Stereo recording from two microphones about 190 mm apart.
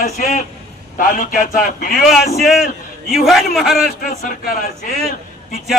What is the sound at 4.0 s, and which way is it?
Speech, 50° left (ahead or behind).